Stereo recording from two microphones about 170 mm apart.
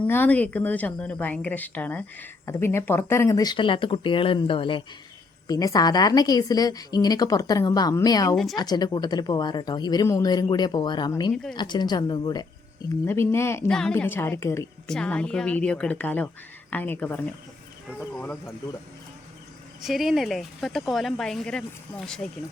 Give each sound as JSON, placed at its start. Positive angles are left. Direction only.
{"t": 0.1, "sound": "a woman's voice", "side_deg": 10}
{"t": 5.5, "sound": "a woman's voice", "side_deg": 20}
{"t": 13.7, "sound": "a woman's voice", "side_deg": 5}
{"t": 14.8, "sound": "a woman's voice", "side_deg": 5}
{"t": 19.8, "sound": "a woman's voice", "side_deg": 0}